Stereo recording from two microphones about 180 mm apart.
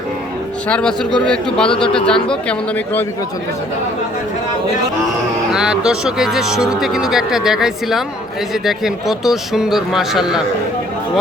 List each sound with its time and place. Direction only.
0.7 s speech: 5° left (ahead or behind)
5.5 s speech: 5° right (ahead or behind)